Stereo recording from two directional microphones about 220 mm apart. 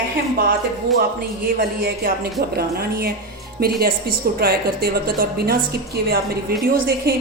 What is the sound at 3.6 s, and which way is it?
A woman's voice, 45° right (ahead or behind).